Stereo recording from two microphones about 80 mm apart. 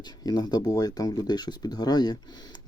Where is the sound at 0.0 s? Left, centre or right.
Left.